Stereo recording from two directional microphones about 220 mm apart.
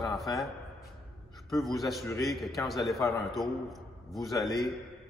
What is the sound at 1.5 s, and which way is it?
A man's voice, centre (ahead or behind).